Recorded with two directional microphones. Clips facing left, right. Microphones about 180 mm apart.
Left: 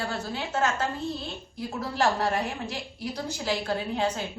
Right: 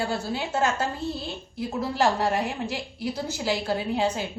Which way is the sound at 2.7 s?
5° right (ahead or behind).